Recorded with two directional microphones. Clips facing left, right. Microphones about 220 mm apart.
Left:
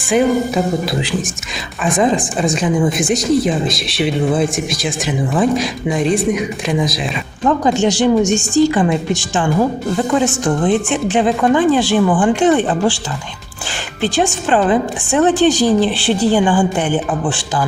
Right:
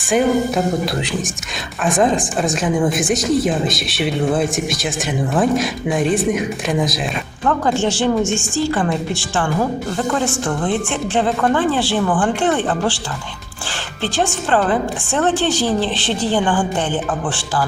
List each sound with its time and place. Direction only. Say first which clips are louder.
0.1 s a woman's voice: left 2 dB; centre (ahead or behind)
7.4 s a woman's voice: left 4 dB; 15° left (ahead or behind)
14.5 s a woman's voice: left 3 dB; 15° left (ahead or behind)